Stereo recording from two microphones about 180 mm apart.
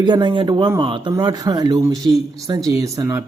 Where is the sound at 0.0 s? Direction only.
25° right (ahead or behind).